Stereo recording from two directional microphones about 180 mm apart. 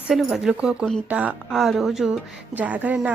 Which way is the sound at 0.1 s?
Centre (ahead or behind).